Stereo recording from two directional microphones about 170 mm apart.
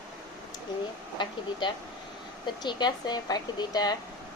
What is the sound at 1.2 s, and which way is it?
Speech, 30° left (ahead or behind).